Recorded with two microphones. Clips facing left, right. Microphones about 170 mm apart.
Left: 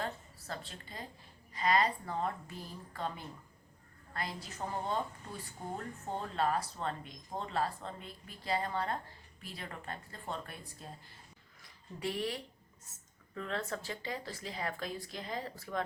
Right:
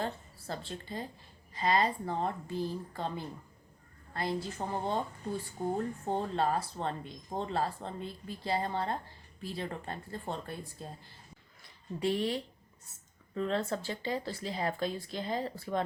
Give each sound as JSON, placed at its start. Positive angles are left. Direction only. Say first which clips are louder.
{"t": 0.0, "sound": "a woman's voice", "louder": "right 3 dB", "side_deg": -30}
{"t": 4.1, "sound": "speech", "louder": "right 7 dB", "side_deg": -30}
{"t": 11.9, "sound": "speech", "louder": "right 6 dB", "side_deg": -30}